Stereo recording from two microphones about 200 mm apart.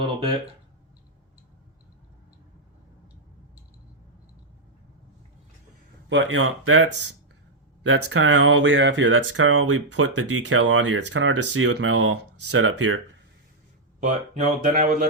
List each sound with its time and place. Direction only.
6.1 s speech: 75° right (ahead or behind)
7.9 s speech: 65° right (ahead or behind)
14.0 s speech: 40° right (ahead or behind)